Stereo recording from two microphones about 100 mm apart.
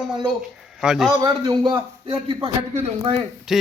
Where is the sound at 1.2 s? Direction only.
40° right (ahead or behind).